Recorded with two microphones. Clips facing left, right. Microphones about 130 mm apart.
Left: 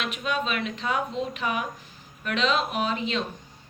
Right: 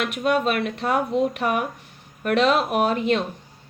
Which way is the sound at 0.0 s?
60° right (ahead or behind).